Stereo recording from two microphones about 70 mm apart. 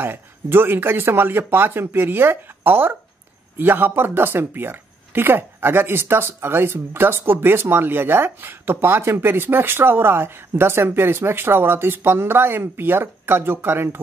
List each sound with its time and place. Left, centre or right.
0.0 s speech: right